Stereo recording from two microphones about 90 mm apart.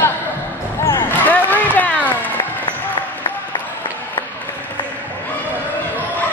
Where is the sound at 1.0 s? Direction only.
20° left (ahead or behind).